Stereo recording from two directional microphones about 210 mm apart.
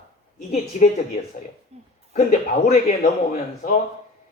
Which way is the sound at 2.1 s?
30° left (ahead or behind).